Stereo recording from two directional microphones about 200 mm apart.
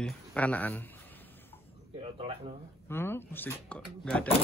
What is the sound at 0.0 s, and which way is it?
Speech, 5° left (ahead or behind).